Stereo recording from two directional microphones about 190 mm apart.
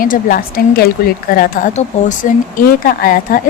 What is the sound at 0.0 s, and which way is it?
A woman's voice, 50° left (ahead or behind).